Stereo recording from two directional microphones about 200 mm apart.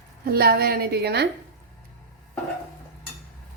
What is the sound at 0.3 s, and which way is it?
A woman's voice, 50° right (ahead or behind).